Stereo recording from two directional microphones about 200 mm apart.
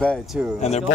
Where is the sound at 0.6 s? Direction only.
35° left (ahead or behind).